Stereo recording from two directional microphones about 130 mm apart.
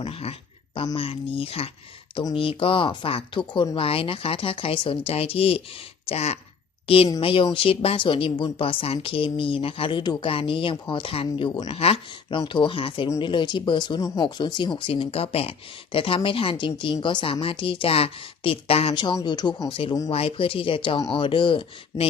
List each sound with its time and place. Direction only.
0.0 s a woman's voice: 50° left (ahead or behind)